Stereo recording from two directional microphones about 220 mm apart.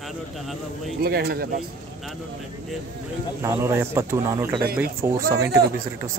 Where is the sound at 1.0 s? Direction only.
45° right (ahead or behind).